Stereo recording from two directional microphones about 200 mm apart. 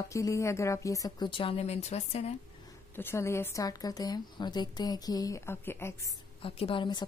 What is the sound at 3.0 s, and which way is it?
Speech, 10° left (ahead or behind).